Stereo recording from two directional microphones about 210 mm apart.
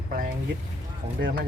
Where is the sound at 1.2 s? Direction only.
55° right (ahead or behind).